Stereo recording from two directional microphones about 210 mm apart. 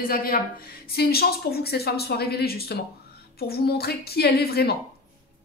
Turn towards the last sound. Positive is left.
turn(degrees=45)  # may be behind; listen again after turning